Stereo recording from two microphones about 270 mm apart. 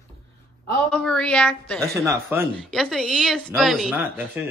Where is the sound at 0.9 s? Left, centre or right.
Centre.